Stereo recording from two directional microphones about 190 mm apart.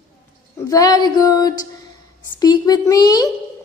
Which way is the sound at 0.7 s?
20° left (ahead or behind).